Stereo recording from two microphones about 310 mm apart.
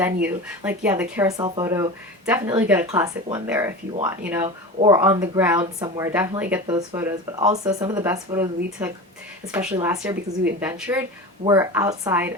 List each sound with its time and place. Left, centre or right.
0.0 s speech: centre
4.4 s speech: centre
4.9 s speech: centre